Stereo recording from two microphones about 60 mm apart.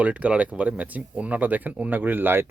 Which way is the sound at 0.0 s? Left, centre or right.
Right.